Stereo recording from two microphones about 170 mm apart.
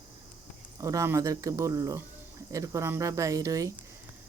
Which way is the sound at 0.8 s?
20° right (ahead or behind).